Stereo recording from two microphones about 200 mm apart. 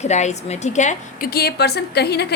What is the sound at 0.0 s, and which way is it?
A woman's voice, 35° left (ahead or behind).